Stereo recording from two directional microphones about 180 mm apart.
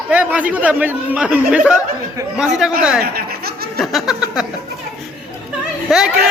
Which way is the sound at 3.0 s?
55° right (ahead or behind).